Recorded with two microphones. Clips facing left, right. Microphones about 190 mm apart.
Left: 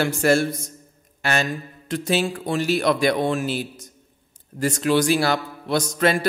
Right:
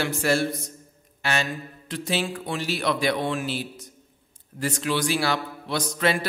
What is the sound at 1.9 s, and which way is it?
Speech, 45° left (ahead or behind).